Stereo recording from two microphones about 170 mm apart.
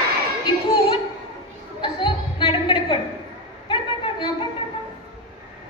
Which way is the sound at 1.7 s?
30° left (ahead or behind).